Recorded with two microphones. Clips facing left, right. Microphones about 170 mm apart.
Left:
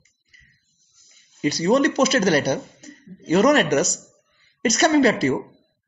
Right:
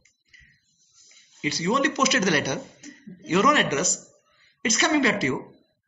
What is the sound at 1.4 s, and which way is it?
Speech, 40° left (ahead or behind).